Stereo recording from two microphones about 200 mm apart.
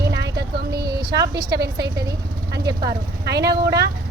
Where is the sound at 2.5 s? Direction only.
60° right (ahead or behind).